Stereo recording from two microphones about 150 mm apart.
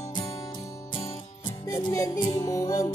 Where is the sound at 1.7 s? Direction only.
20° left (ahead or behind).